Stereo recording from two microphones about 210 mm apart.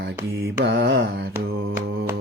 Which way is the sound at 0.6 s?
60° right (ahead or behind).